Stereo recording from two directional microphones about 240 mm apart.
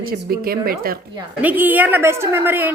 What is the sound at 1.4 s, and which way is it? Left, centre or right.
A woman's voice, centre.